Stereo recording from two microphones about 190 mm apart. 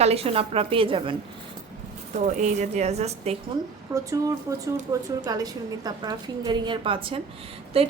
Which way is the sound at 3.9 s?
15° right (ahead or behind).